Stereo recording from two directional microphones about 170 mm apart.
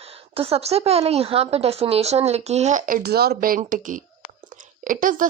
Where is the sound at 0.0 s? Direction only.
35° right (ahead or behind).